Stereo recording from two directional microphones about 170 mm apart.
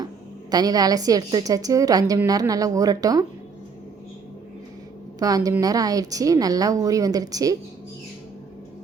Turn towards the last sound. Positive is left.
turn(degrees=-20)  # may be behind; listen again after turning